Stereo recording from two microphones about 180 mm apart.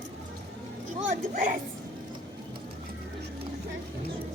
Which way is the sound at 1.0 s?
45° right (ahead or behind).